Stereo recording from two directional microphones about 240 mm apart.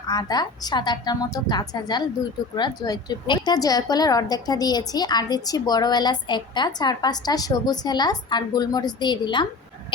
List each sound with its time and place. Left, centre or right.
0.1 s a woman's voice: centre